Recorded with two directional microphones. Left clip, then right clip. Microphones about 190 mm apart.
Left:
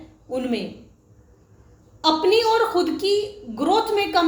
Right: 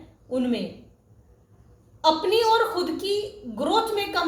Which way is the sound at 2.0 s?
35° left (ahead or behind).